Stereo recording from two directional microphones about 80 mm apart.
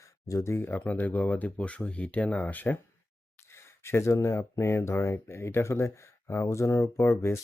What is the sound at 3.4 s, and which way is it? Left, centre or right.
Speech, left.